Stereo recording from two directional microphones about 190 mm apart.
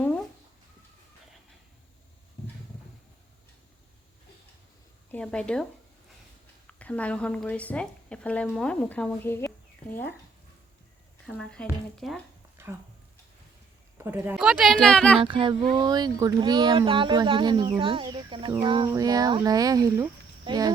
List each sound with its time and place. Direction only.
0.0 s a sound: 5° left (ahead or behind)
5.1 s a woman's voice: 5° left (ahead or behind)
6.7 s a woman's voice: 5° left (ahead or behind)
11.3 s a woman's voice: 5° left (ahead or behind)
12.6 s a sound: 15° right (ahead or behind)
14.0 s speech: 15° right (ahead or behind)
14.3 s a woman's voice: centre (ahead or behind)
15.2 s speech: 25° right (ahead or behind)